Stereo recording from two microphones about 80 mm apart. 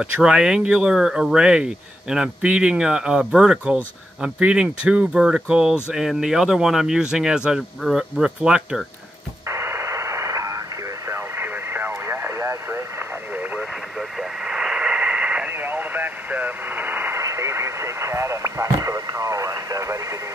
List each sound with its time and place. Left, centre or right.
0.0 s speech: centre
9.5 s radio: right
13.3 s radio: right
13.9 s radio: centre; by 17.2 s right
17.2 s radio: right